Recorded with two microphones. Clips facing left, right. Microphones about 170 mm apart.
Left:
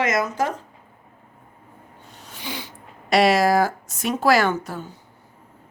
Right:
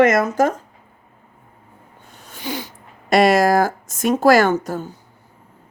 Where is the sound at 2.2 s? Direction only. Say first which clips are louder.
Right 6 dB; 50° right (ahead or behind).